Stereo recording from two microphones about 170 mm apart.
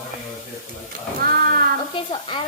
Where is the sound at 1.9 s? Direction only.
30° left (ahead or behind).